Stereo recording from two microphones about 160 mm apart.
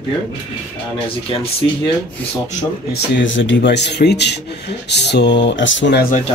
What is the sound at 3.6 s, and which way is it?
Speech, 90° left.